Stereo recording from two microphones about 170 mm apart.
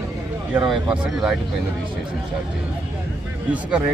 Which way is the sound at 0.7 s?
5° right (ahead or behind).